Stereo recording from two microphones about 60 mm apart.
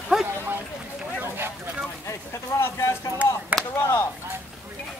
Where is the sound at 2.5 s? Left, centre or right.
Left.